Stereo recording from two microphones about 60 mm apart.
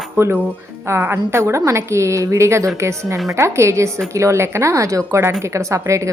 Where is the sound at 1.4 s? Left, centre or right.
Right.